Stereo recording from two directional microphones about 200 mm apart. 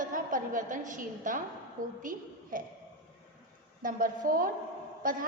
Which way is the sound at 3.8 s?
45° right (ahead or behind).